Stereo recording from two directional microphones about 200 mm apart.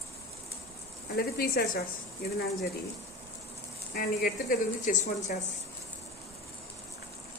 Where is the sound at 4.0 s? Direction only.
45° left (ahead or behind).